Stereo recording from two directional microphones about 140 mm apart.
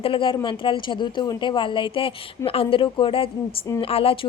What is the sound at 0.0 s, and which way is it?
Speech, 40° left (ahead or behind).